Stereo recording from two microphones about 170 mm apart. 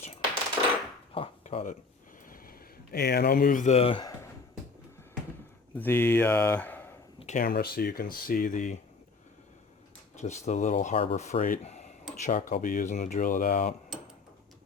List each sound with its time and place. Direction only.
1.1 s a sound: 35° left (ahead or behind)
2.2 s speech: 55° left (ahead or behind); by 4.0 s 35° left (ahead or behind)
5.7 s speech: 10° left (ahead or behind)
7.2 s speech: 45° left (ahead or behind)
7.4 s speech: 65° left (ahead or behind); by 8.8 s 50° left (ahead or behind)
10.2 s speech: 40° left (ahead or behind)
11.6 s a sound: 40° left (ahead or behind)
12.2 s speech: 50° left (ahead or behind)